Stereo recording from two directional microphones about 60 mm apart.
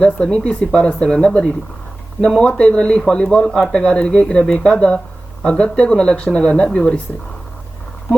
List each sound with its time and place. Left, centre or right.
0.0 s speech: centre
3.4 s speech: centre
3.7 s speech: centre